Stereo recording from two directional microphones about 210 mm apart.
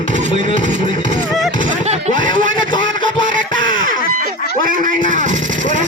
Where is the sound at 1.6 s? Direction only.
35° right (ahead or behind).